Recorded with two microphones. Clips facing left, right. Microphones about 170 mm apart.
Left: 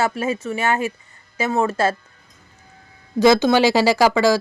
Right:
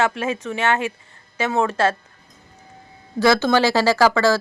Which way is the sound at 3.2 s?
15° left (ahead or behind).